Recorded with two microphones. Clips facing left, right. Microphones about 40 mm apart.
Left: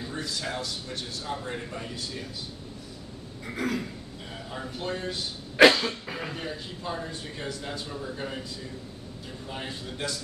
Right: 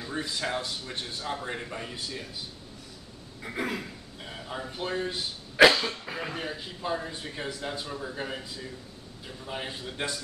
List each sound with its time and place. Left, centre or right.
0.1 s a man's voice: right
3.5 s a man's voice: centre
5.6 s cough: centre
6.3 s a man's voice: centre
9.5 s a man's voice: centre